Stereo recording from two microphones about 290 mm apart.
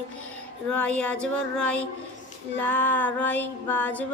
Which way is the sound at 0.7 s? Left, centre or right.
Centre.